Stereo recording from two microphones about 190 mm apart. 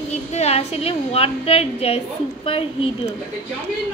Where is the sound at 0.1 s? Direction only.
35° left (ahead or behind).